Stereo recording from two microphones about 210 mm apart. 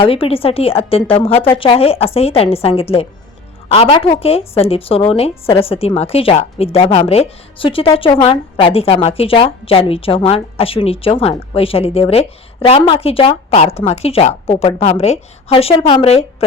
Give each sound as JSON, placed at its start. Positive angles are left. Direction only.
{"t": 0.0, "sound": "a woman's voice", "side_deg": 25}